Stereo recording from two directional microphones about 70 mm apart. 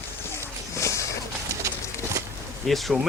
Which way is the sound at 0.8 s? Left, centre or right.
Left.